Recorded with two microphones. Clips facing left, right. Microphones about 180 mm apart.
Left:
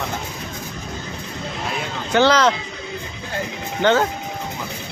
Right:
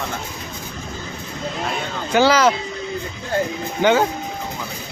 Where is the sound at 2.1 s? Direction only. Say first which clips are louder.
Right 1 dB; 5° right (ahead or behind).